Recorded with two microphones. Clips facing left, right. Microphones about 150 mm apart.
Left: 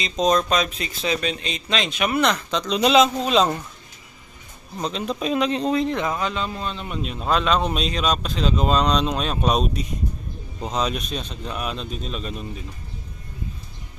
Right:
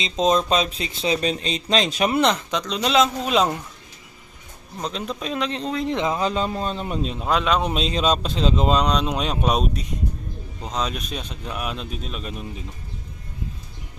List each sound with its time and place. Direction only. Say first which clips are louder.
0.0 s speech: even; 25° right (ahead or behind)
2.6 s speech: left 3 dB; 5° left (ahead or behind)
4.8 s speech: left 3 dB; centre (ahead or behind)
5.8 s speech: even; 20° right (ahead or behind)
6.1 s speech: right 3 dB; 35° right (ahead or behind)
7.2 s a man's voice: left 1 dB; 10° right (ahead or behind)
7.8 s speech: right 2 dB; 25° right (ahead or behind)
10.6 s a man's voice: left 3 dB; 5° left (ahead or behind)